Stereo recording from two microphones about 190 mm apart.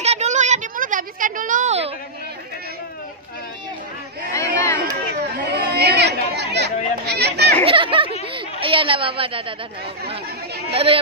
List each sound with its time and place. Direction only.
0.0 s a sound: 35° right (ahead or behind)
4.3 s crowd: 15° left (ahead or behind)
5.7 s chatter: 60° right (ahead or behind)
7.6 s speech: 25° right (ahead or behind)
8.3 s chatter: 30° right (ahead or behind)
10.7 s speech: 30° right (ahead or behind)